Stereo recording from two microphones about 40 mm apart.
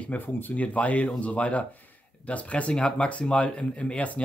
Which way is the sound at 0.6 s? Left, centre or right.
Left.